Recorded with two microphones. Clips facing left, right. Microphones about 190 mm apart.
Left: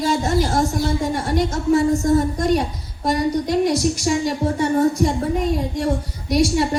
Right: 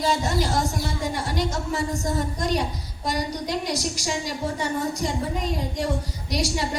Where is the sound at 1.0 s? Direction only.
55° left (ahead or behind).